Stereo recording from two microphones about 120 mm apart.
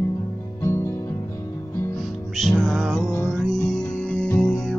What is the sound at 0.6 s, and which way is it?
Music, 20° left (ahead or behind).